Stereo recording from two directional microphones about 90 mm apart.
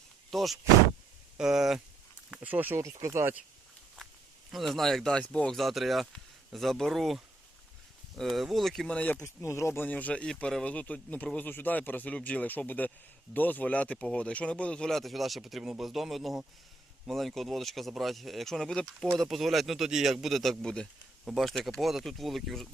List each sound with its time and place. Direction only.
0.3 s speech: centre (ahead or behind)
2.3 s speech: 15° right (ahead or behind)
2.7 s speech: 35° right (ahead or behind)
4.5 s speech: centre (ahead or behind)
9.0 s speech: 15° left (ahead or behind)
9.2 s speech: 35° left (ahead or behind); by 22.7 s centre (ahead or behind)